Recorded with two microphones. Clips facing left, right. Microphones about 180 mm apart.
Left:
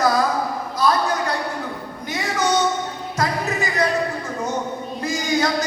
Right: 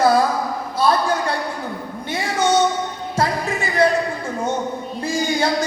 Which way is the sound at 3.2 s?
30° right (ahead or behind).